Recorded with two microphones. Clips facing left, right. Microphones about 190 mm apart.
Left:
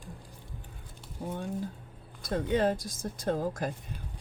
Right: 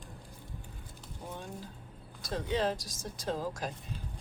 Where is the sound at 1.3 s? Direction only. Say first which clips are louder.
Left 8 dB; 50° left (ahead or behind).